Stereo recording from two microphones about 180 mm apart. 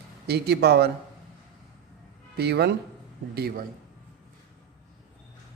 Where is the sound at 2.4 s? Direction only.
65° right (ahead or behind).